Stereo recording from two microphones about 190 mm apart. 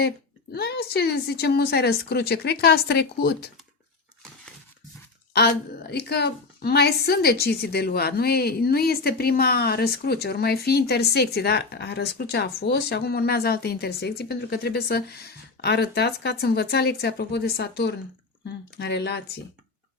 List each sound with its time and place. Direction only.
0.5 s a woman's voice: 55° left (ahead or behind)
5.3 s a woman's voice: 60° left (ahead or behind)